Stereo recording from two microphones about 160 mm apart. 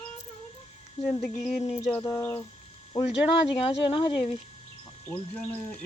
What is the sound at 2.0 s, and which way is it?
Speech, 15° left (ahead or behind).